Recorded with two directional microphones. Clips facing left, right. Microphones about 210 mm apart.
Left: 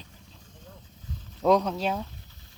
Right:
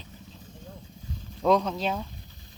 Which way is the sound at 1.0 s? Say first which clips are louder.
Right 1 dB; 10° right (ahead or behind).